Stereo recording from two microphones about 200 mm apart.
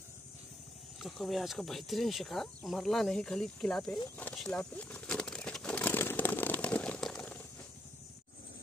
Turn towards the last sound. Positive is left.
turn(degrees=5)  # may be behind; listen again after turning